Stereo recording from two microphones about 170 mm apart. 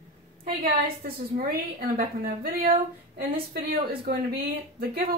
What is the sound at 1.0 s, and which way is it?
Speech, 60° right (ahead or behind).